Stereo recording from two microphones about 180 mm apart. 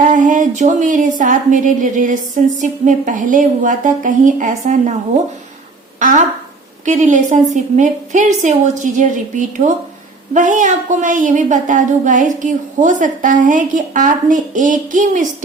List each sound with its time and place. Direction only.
0.0 s a woman's voice: 45° right (ahead or behind)
6.0 s a woman's voice: 45° right (ahead or behind)